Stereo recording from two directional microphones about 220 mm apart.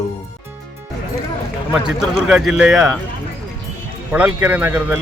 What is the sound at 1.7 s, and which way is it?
A man's voice, centre (ahead or behind).